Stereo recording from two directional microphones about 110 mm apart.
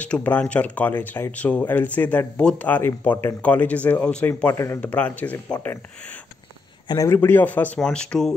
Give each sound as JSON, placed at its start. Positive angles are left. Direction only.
{"t": 0.0, "sound": "speech", "side_deg": 15}
{"t": 7.1, "sound": "speech", "side_deg": 20}